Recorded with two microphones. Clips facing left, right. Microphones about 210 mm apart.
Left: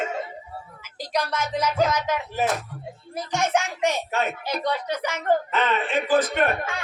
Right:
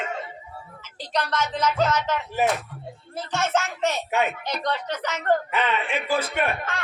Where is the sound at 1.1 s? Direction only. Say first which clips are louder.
Even; 10° left (ahead or behind).